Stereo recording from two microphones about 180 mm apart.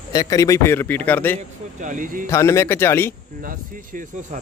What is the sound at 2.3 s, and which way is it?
Speech, 15° left (ahead or behind).